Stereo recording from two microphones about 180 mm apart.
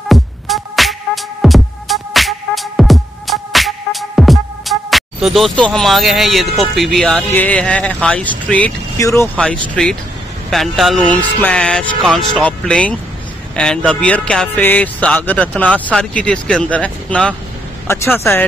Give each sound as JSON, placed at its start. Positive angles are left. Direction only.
{"t": 0.1, "sound": "music", "side_deg": 0}
{"t": 6.6, "sound": "speech", "side_deg": 0}
{"t": 9.8, "sound": "music", "side_deg": 5}
{"t": 13.6, "sound": "speech", "side_deg": 5}